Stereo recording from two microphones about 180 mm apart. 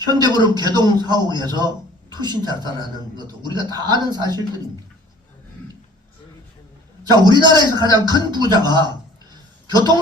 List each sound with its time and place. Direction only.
0.1 s a man's voice: 25° right (ahead or behind)
7.0 s a man's voice: 25° right (ahead or behind)